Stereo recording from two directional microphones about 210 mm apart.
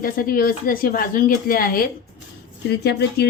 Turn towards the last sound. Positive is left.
turn(degrees=50)  # may be behind; listen again after turning